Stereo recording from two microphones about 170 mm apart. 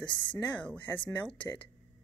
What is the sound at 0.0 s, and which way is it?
Speech, 25° left (ahead or behind).